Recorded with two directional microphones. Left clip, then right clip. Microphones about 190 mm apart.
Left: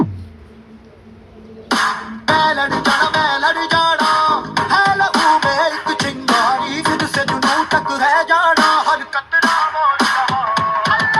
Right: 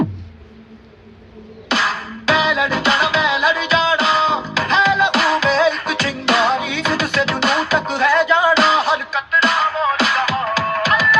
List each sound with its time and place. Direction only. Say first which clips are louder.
1.6 s music: left 1 dB; 25° right (ahead or behind)